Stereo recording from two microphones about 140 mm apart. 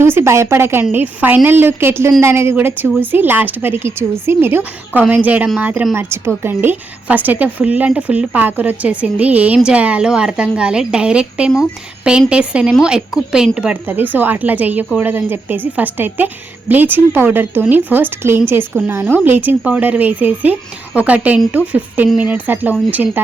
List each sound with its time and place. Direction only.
0.0 s a woman's voice: 15° right (ahead or behind)